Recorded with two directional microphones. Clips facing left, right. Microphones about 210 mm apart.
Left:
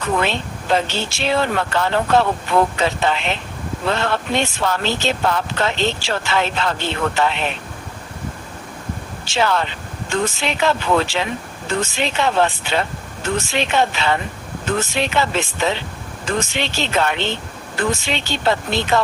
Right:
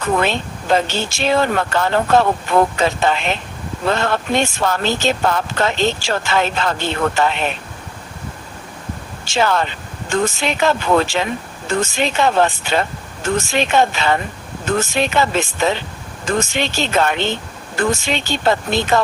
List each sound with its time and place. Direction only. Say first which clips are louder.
0.2 s speech: right 2 dB; 45° right (ahead or behind)
9.2 s speech: right 2 dB; 45° right (ahead or behind)